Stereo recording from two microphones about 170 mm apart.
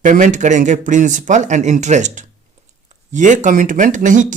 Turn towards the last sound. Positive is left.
turn(degrees=-50)  # may be behind; listen again after turning